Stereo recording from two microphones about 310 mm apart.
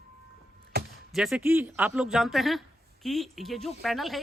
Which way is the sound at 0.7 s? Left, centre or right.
Right.